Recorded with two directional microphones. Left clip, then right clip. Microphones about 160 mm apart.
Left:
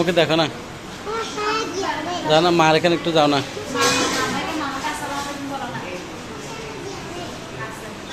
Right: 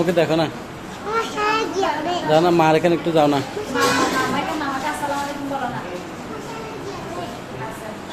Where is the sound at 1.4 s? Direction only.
60° right (ahead or behind).